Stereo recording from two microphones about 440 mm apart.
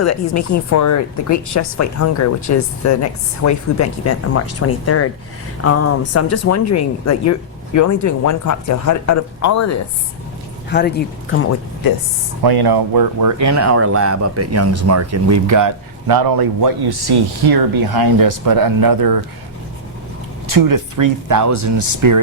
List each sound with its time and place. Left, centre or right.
0.0 s a woman's voice: left
10.7 s speech: left
12.4 s speech: right
20.5 s speech: right